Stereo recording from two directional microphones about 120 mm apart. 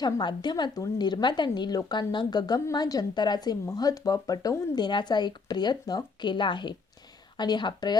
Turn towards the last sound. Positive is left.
turn(degrees=35)  # may be behind; listen again after turning